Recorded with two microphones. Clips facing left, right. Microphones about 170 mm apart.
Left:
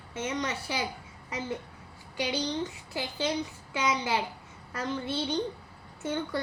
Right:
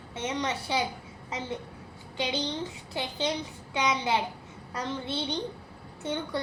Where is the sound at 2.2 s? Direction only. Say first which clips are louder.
Even; 20° right (ahead or behind).